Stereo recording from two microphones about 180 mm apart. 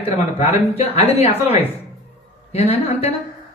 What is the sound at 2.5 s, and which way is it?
Speech, 35° left (ahead or behind).